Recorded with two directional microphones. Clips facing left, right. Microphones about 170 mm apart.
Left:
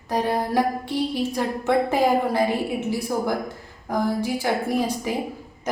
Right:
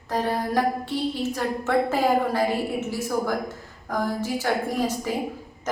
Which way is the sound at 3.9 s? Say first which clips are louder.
Left 3 dB; 10° left (ahead or behind).